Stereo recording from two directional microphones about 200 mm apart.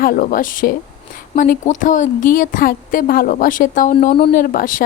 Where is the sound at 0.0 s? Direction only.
45° left (ahead or behind).